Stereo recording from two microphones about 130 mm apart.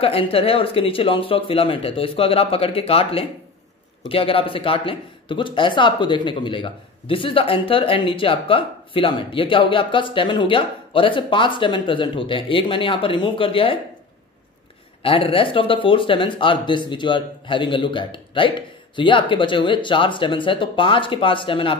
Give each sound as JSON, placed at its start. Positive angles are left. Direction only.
{"t": 0.0, "sound": "speech", "side_deg": 45}
{"t": 15.0, "sound": "speech", "side_deg": 45}